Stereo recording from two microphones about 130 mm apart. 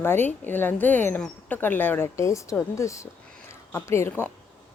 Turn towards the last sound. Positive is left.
turn(degrees=15)  # may be behind; listen again after turning